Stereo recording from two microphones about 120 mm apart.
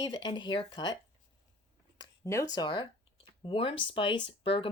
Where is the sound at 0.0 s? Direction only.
40° left (ahead or behind).